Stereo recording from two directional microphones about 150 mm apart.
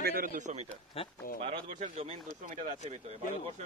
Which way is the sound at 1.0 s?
40° left (ahead or behind).